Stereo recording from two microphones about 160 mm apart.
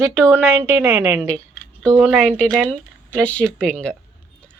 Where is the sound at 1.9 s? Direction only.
Centre (ahead or behind).